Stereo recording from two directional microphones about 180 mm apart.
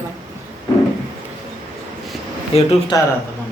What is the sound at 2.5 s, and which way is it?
Speech, 35° left (ahead or behind).